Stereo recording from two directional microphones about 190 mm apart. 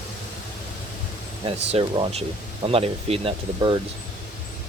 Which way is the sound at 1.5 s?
30° right (ahead or behind).